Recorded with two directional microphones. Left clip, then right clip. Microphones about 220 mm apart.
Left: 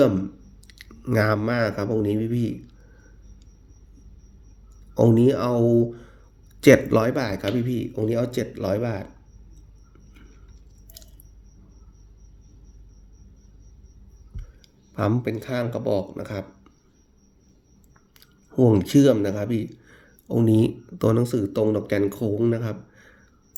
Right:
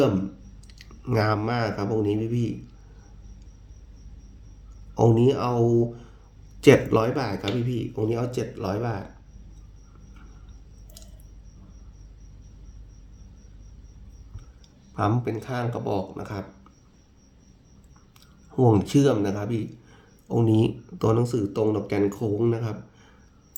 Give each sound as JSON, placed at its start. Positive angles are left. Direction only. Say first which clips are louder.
{"t": 0.7, "sound": "speech", "louder": "left 2 dB", "side_deg": 25}
{"t": 4.9, "sound": "speech", "louder": "left 2 dB", "side_deg": 25}
{"t": 14.9, "sound": "speech", "louder": "left 1 dB", "side_deg": 25}
{"t": 18.5, "sound": "speech", "louder": "left 2 dB", "side_deg": 20}